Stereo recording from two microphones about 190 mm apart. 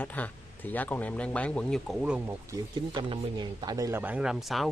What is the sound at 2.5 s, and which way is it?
Speech, 25° right (ahead or behind).